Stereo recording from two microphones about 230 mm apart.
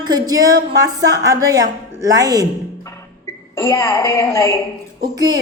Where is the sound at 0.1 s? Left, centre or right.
Centre.